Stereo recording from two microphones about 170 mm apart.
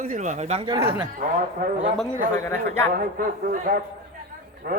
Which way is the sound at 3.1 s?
55° right (ahead or behind).